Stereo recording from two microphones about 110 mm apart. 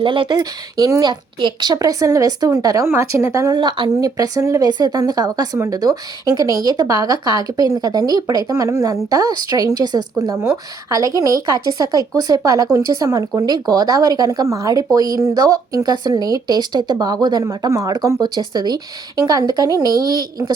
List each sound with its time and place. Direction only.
0.0 s a woman's voice: 50° right (ahead or behind); by 1.1 s 35° right (ahead or behind)
1.4 s a woman's voice: 45° right (ahead or behind); by 3.5 s 25° right (ahead or behind)
3.5 s a woman's voice: 40° right (ahead or behind)